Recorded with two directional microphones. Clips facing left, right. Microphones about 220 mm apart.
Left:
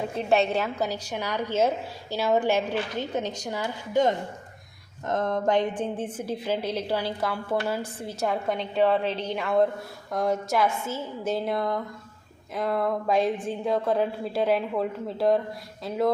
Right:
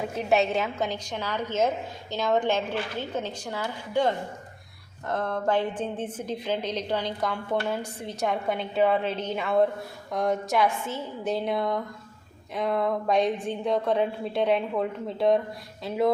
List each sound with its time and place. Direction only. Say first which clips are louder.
0.3 s a woman's voice: even; centre (ahead or behind)